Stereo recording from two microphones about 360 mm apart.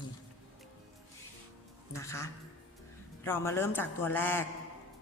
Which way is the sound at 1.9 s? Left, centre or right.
Centre.